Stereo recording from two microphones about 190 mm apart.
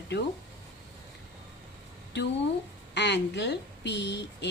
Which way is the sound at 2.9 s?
65° left (ahead or behind).